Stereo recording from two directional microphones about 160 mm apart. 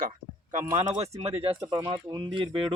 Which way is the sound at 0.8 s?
40° right (ahead or behind).